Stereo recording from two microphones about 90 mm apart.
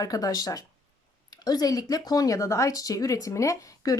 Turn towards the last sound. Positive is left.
turn(degrees=40)  # may be behind; listen again after turning